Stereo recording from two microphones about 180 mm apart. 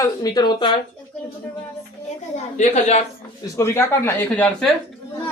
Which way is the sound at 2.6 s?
40° left (ahead or behind).